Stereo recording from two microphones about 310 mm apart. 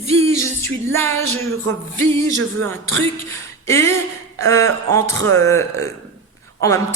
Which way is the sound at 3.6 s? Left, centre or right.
Centre.